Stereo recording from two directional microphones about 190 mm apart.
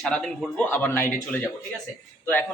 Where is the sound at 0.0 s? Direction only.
5° left (ahead or behind).